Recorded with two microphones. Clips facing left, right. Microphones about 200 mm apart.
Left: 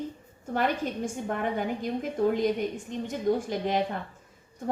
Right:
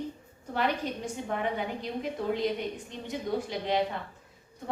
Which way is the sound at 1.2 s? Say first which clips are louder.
Left 1 dB; 50° left (ahead or behind).